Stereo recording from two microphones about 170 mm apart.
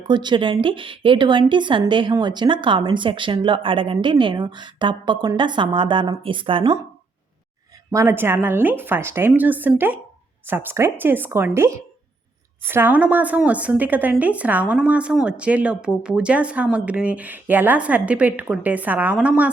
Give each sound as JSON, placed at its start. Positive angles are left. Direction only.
{"t": 0.1, "sound": "a woman's voice", "side_deg": -25}
{"t": 7.9, "sound": "speech", "side_deg": -15}